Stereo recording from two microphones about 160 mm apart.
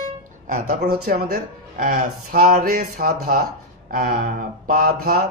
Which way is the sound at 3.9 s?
70° right (ahead or behind).